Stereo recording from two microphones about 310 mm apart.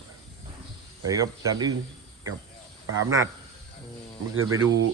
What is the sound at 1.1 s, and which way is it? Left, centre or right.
Speech, centre.